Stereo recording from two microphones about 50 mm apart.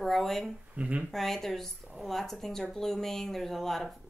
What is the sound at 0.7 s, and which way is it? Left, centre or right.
Speech, right.